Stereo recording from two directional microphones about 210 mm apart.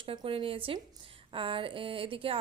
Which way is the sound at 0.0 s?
25° right (ahead or behind).